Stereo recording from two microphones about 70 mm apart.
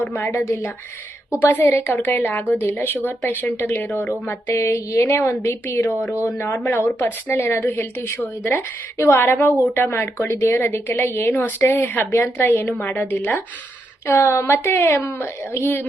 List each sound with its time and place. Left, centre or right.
0.1 s a woman's voice: left
4.5 s a woman's voice: left
14.1 s a woman's voice: left